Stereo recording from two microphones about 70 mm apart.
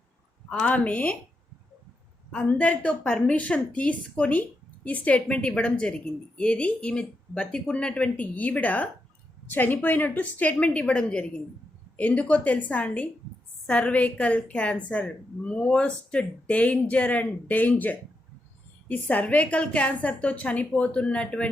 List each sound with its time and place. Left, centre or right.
0.6 s a woman's voice: left
2.3 s a woman's voice: left